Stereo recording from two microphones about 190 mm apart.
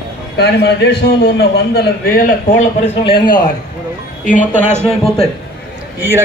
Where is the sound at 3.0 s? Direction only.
25° left (ahead or behind).